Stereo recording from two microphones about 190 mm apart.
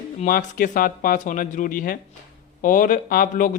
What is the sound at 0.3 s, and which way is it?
Speech, 45° left (ahead or behind).